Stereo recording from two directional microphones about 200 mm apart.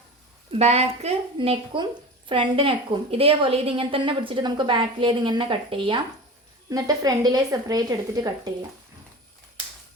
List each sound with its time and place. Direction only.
0.5 s a woman's voice: 30° right (ahead or behind)